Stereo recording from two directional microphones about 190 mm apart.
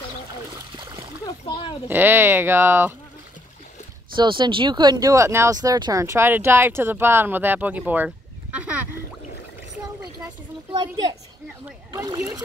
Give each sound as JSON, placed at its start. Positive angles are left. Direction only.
{"t": 0.7, "sound": "splash", "side_deg": -25}
{"t": 1.2, "sound": "splash", "side_deg": 25}
{"t": 1.9, "sound": "speech", "side_deg": -10}
{"t": 4.1, "sound": "speech", "side_deg": -25}
{"t": 10.7, "sound": "speech", "side_deg": -25}